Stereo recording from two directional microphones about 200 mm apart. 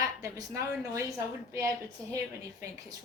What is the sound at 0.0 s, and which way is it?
A woman's voice, 15° right (ahead or behind).